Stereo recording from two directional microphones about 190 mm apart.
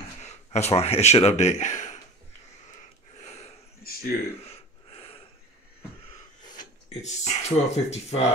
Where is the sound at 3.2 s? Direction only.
35° left (ahead or behind).